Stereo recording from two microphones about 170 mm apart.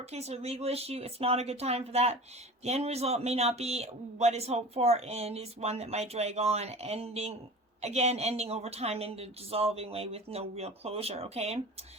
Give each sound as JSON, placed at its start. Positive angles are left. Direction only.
{"t": 0.0, "sound": "a man's voice", "side_deg": -40}